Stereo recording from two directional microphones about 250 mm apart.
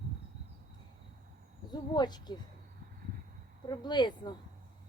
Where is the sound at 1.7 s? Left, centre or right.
Centre.